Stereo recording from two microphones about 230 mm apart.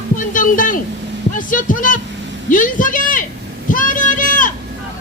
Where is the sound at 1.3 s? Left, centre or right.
Left.